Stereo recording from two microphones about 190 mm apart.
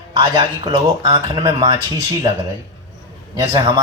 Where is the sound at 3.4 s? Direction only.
25° right (ahead or behind).